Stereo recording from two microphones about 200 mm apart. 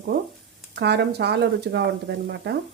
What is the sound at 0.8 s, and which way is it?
Speech, 55° right (ahead or behind).